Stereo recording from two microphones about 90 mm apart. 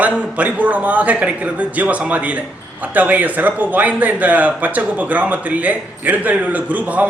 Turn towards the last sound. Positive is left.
turn(degrees=-20)  # may be behind; listen again after turning